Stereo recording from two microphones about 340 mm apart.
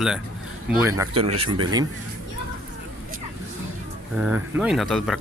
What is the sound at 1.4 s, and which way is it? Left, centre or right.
Speech, right.